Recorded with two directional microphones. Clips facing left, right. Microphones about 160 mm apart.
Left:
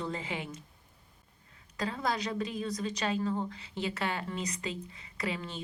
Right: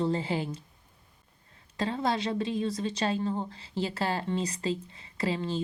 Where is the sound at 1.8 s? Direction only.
25° right (ahead or behind).